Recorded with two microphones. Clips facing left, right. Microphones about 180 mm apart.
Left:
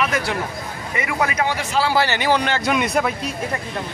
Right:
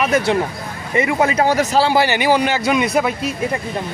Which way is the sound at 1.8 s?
15° right (ahead or behind).